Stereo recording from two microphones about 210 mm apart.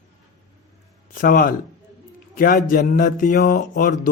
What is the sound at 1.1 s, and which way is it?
Speech, 40° left (ahead or behind).